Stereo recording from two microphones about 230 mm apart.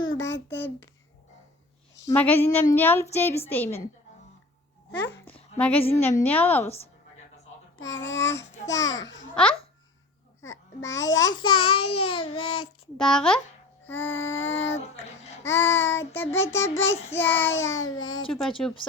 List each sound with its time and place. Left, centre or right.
0.2 s a sound: left
0.5 s a woman's voice: centre
2.0 s a woman's voice: centre
5.2 s a sound: centre
6.0 s a woman's voice: centre
6.7 s a woman's voice: left
7.8 s a child's voice: left
9.3 s speech: centre
10.5 s a child's voice: left
13.0 s speech: centre
13.9 s a child's voice: left
15.9 s a woman's voice: centre
17.5 s a child's voice: left
18.3 s speech: centre